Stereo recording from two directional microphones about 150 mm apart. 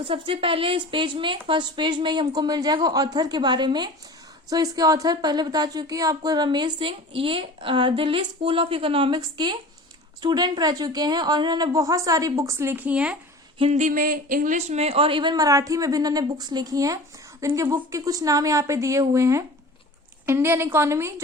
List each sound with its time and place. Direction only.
0.0 s a woman's voice: 35° right (ahead or behind); by 13.1 s 5° right (ahead or behind)
13.6 s a woman's voice: 50° right (ahead or behind); by 21.1 s 15° right (ahead or behind)